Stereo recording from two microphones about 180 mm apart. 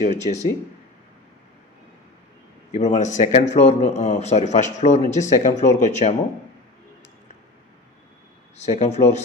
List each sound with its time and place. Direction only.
0.3 s speech: 35° left (ahead or behind)
2.7 s speech: 40° left (ahead or behind)
8.5 s speech: 40° left (ahead or behind)